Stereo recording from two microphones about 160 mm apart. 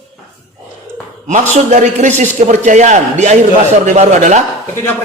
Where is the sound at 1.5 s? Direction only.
45° right (ahead or behind).